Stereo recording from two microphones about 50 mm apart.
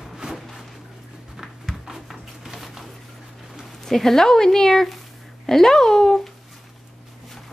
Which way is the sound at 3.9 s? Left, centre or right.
Centre.